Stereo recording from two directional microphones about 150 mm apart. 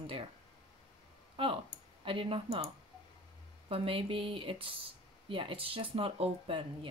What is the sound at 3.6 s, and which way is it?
Speech, 40° right (ahead or behind).